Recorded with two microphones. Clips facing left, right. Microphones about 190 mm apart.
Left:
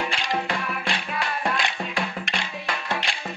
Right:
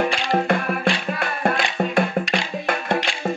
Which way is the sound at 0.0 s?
55° right (ahead or behind).